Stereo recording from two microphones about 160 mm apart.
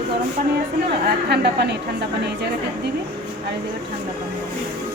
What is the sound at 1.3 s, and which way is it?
Speech, 90° right.